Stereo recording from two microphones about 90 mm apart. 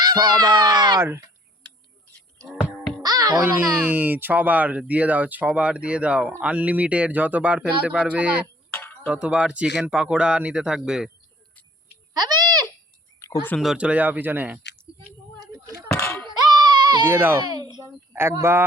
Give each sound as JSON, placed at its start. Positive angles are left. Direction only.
{"t": 0.0, "sound": "speech", "side_deg": -50}
{"t": 3.0, "sound": "music", "side_deg": -45}
{"t": 3.8, "sound": "speech", "side_deg": -20}
{"t": 8.7, "sound": "a sound", "side_deg": 20}
{"t": 9.0, "sound": "speech", "side_deg": -15}
{"t": 13.1, "sound": "a sound", "side_deg": 30}
{"t": 13.6, "sound": "speech", "side_deg": -10}
{"t": 15.9, "sound": "a sound", "side_deg": 30}
{"t": 16.2, "sound": "baby cry", "side_deg": -55}
{"t": 17.1, "sound": "speech", "side_deg": -25}
{"t": 17.4, "sound": "a sound", "side_deg": -50}
{"t": 18.1, "sound": "speech", "side_deg": -25}